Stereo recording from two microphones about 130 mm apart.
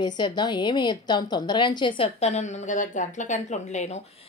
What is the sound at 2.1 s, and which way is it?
A woman's voice, 55° left (ahead or behind).